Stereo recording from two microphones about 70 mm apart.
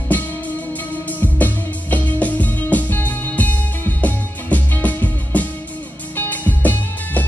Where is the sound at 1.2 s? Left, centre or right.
Left.